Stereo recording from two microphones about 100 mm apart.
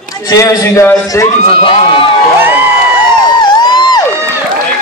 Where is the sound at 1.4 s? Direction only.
60° left (ahead or behind).